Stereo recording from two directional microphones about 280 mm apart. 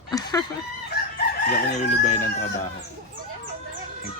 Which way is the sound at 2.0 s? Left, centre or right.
Left.